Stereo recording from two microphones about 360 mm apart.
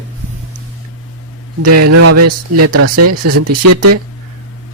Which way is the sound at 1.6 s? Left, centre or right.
Right.